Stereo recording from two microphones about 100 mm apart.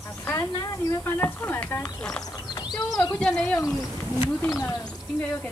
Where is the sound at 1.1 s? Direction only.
20° left (ahead or behind).